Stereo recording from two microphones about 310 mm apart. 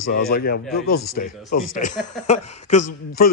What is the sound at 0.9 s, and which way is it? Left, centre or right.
Speech, left.